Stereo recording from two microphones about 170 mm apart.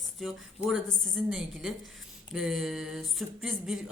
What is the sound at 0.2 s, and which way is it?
A woman's voice, centre (ahead or behind).